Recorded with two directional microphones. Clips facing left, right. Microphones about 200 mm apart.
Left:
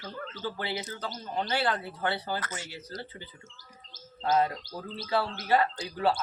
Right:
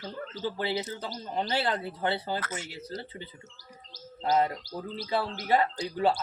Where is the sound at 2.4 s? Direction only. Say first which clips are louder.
Right 2 dB; 10° right (ahead or behind).